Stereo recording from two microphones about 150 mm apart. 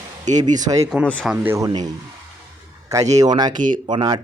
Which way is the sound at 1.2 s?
15° right (ahead or behind).